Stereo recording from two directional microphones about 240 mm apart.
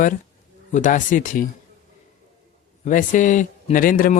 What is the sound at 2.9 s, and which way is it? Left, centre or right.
Speech, left.